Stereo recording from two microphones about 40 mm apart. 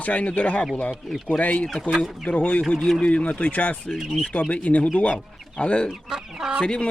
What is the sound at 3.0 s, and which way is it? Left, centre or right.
Speech, left.